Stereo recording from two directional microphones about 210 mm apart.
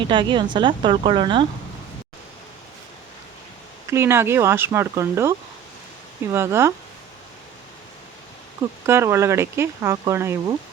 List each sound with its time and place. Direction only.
0.1 s speech: 20° right (ahead or behind)
3.8 s speech: 10° right (ahead or behind)
6.3 s speech: 10° right (ahead or behind)
8.9 s speech: 10° right (ahead or behind)